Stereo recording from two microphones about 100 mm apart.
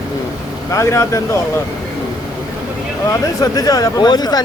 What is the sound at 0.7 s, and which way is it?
Speech, 30° left (ahead or behind).